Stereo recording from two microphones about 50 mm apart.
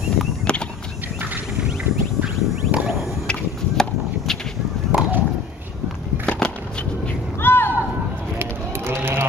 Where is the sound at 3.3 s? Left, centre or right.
Centre.